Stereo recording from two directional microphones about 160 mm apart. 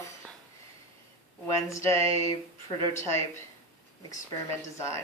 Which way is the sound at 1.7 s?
20° left (ahead or behind).